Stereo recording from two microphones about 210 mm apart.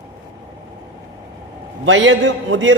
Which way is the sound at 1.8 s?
65° right (ahead or behind).